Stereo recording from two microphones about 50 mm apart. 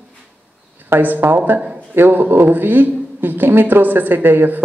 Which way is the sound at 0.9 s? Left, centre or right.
Right.